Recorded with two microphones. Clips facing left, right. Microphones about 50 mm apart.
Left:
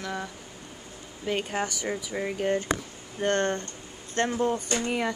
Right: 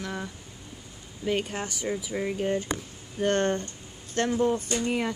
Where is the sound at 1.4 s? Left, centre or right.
Left.